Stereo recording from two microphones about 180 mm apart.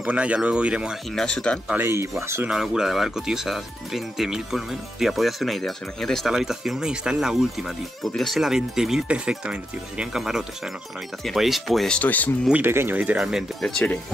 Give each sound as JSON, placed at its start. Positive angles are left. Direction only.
{"t": 0.0, "sound": "speech", "side_deg": -5}
{"t": 1.7, "sound": "speech", "side_deg": -10}
{"t": 2.5, "sound": "speech", "side_deg": -5}
{"t": 12.4, "sound": "speech", "side_deg": -10}